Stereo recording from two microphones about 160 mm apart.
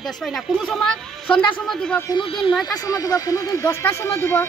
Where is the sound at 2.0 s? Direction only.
30° left (ahead or behind).